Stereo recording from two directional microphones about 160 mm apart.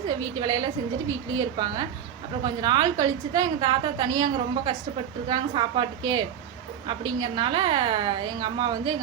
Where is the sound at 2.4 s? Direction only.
25° right (ahead or behind).